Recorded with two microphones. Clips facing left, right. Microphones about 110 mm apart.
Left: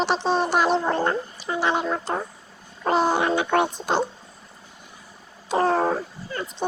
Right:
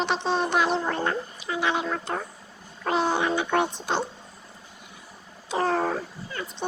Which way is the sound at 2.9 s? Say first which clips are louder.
Left 4 dB; 40° left (ahead or behind).